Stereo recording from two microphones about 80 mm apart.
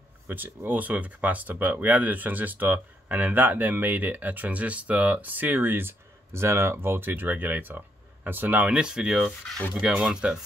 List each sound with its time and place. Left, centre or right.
0.3 s speech: right